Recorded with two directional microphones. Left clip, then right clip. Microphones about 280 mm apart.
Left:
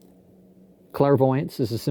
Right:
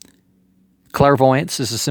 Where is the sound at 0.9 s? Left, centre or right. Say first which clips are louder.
Right 7 dB; right.